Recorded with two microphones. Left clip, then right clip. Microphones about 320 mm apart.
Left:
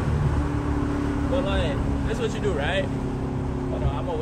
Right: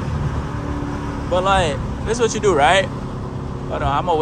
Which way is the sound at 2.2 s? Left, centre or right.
Right.